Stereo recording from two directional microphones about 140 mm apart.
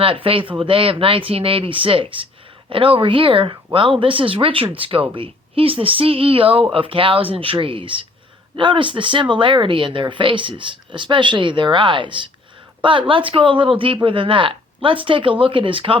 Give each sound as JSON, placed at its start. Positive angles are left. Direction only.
{"t": 0.0, "sound": "speech", "side_deg": -40}